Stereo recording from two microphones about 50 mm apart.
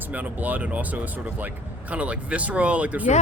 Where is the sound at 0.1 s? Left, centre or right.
Right.